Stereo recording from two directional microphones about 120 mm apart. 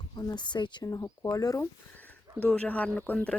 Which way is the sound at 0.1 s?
35° left (ahead or behind).